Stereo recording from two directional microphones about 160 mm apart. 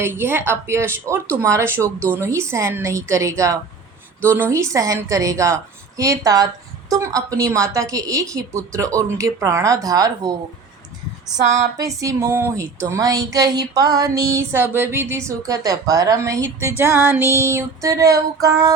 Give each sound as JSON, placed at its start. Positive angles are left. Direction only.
{"t": 0.0, "sound": "speech", "side_deg": -15}
{"t": 11.9, "sound": "speech", "side_deg": -20}